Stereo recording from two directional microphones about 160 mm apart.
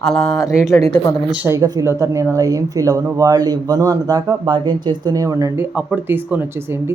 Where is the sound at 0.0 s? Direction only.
5° left (ahead or behind).